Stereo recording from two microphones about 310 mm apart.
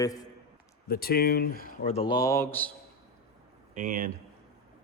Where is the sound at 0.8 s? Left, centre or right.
Left; by 2.7 s centre.